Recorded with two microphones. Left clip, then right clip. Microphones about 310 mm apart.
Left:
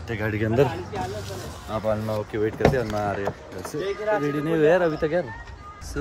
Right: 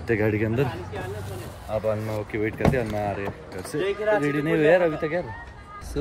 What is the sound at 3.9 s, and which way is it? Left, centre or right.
Speech, right.